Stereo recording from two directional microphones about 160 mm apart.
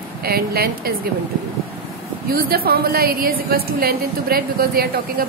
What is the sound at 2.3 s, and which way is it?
A woman's voice, 70° right (ahead or behind).